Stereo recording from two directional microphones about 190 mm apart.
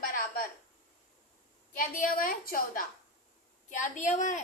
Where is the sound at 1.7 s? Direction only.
45° left (ahead or behind).